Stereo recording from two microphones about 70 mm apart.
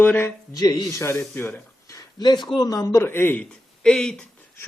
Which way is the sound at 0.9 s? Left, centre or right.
Left.